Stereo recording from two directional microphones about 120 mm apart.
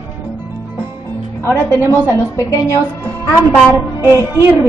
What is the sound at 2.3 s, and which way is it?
Speech, 25° left (ahead or behind).